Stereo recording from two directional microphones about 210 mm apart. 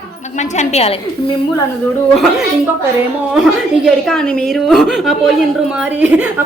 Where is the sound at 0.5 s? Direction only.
30° left (ahead or behind).